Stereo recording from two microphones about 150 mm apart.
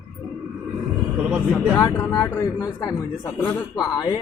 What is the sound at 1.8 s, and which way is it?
Speech, 25° left (ahead or behind).